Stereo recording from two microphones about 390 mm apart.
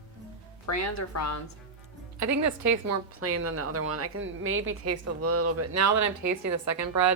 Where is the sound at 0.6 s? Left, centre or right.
Left.